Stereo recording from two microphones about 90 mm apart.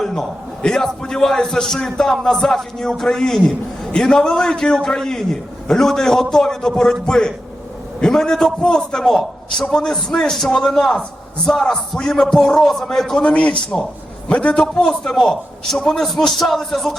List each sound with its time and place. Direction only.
0.0 s a man's voice: 5° left (ahead or behind)